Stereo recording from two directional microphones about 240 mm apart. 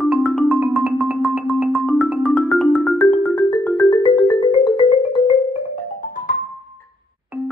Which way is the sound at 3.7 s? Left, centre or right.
Centre.